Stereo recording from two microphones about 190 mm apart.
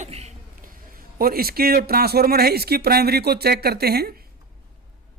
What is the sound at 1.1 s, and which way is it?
Speech, 50° right (ahead or behind).